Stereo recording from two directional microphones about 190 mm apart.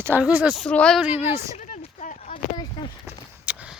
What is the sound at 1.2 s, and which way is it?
Speech, 15° right (ahead or behind).